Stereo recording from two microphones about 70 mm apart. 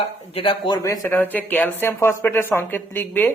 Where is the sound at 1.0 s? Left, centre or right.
Left.